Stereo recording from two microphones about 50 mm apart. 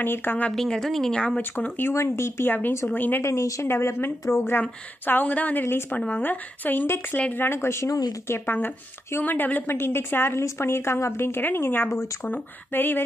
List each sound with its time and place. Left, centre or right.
0.0 s a woman's voice: left
0.5 s speech: centre
1.1 s speech: left
2.0 s speech: left
2.4 s speech: left
3.2 s speech: left
3.6 s speech: left
4.6 s speech: left
7.3 s speech: left
8.5 s a woman's voice: left